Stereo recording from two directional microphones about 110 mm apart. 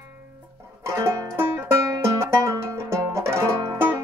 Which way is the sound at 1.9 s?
25° right (ahead or behind).